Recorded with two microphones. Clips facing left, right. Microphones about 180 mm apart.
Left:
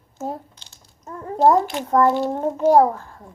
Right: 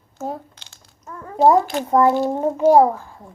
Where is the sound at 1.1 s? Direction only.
25° left (ahead or behind).